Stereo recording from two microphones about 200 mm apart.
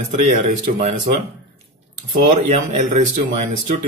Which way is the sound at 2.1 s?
35° right (ahead or behind).